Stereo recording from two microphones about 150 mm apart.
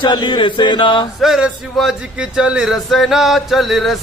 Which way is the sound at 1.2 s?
Centre (ahead or behind).